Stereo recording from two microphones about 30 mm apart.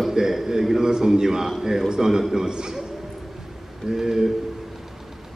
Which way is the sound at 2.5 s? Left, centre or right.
Right.